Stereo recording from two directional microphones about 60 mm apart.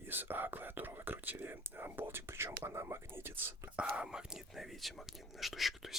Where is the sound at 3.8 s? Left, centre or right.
Centre.